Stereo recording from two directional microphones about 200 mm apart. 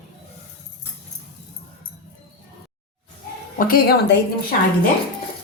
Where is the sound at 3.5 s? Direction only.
45° left (ahead or behind).